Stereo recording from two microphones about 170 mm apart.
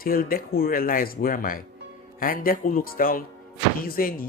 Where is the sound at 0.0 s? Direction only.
60° left (ahead or behind).